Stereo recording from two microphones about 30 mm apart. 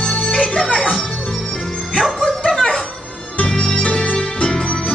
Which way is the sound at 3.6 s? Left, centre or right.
Left.